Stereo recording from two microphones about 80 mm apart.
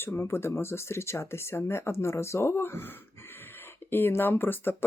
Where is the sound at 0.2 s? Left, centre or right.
Left.